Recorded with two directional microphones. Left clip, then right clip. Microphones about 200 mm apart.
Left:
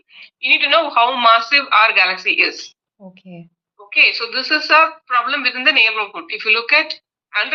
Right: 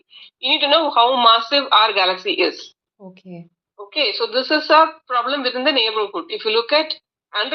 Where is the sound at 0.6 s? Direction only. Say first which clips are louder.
Right 2 dB; 50° left (ahead or behind).